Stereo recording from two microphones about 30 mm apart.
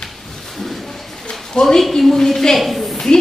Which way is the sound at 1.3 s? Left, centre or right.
Centre.